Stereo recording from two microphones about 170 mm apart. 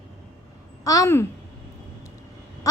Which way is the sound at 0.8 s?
20° left (ahead or behind).